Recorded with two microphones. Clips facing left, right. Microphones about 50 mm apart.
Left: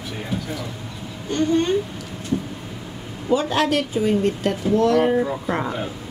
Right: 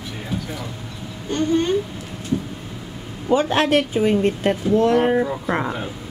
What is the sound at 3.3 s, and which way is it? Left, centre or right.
Speech, right.